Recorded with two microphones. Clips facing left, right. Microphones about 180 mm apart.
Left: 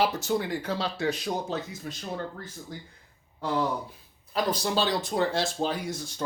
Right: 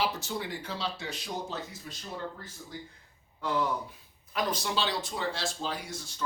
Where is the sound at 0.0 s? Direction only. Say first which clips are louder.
Left 6 dB; 45° left (ahead or behind).